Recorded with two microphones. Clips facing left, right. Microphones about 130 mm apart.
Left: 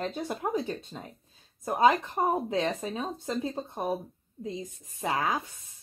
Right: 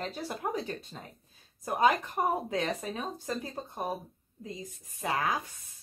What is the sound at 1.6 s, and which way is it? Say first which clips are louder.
Speech: left 3 dB; 25° left (ahead or behind).